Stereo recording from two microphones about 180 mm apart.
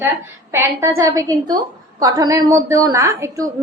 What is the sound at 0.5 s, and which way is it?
A woman's voice, 15° right (ahead or behind).